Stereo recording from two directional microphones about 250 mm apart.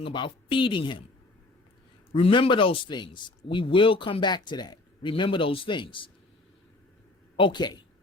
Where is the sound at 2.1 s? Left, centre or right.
Left.